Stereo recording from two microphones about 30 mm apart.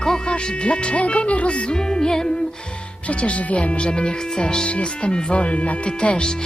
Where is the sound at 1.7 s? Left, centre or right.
Left.